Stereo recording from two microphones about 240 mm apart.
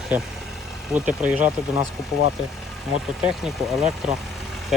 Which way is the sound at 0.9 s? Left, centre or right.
Centre.